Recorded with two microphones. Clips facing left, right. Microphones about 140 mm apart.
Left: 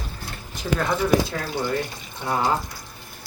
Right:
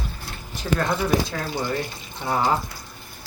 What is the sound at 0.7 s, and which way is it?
Speech, centre (ahead or behind).